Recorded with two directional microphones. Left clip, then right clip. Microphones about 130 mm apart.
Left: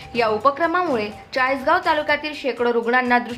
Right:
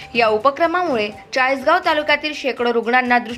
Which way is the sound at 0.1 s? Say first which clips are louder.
Right 3 dB; 25° right (ahead or behind).